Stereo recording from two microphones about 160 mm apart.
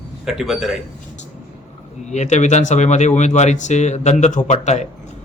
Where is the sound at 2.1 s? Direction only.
45° left (ahead or behind).